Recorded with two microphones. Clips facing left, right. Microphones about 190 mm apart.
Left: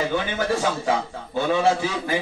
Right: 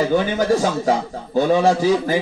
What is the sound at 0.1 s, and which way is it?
A man's voice, 40° right (ahead or behind).